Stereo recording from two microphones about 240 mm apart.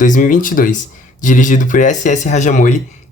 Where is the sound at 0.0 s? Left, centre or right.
Left.